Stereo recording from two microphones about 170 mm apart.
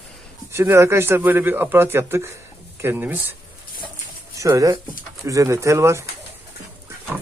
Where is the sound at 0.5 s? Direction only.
15° right (ahead or behind).